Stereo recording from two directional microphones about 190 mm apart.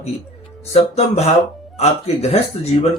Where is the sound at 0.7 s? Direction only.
35° left (ahead or behind).